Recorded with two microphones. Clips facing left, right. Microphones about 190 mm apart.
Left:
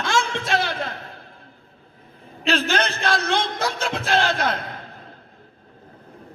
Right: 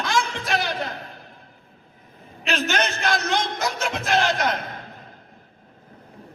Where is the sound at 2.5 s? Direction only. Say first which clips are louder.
Left 2 dB; 30° left (ahead or behind).